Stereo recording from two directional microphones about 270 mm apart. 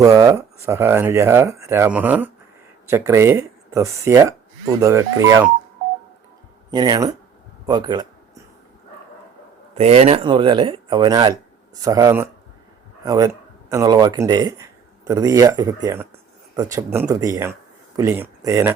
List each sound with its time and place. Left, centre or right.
0.0 s speech: centre
6.7 s speech: centre
9.7 s speech: right